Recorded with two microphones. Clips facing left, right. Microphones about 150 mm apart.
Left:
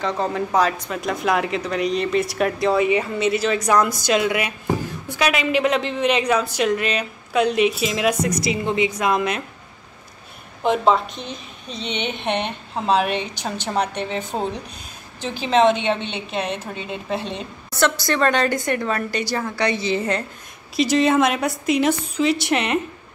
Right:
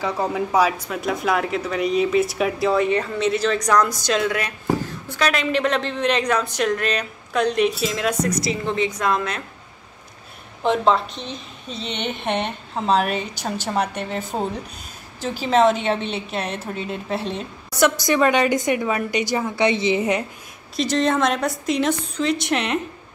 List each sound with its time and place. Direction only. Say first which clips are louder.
0.0 s a woman's voice: even; 10° right (ahead or behind); by 9.4 s 15° left (ahead or behind)
10.6 s a woman's voice: left 1 dB; 5° left (ahead or behind)
17.6 s a woman's voice: right 2 dB; 15° right (ahead or behind)
20.7 s a woman's voice: left 3 dB; 5° left (ahead or behind)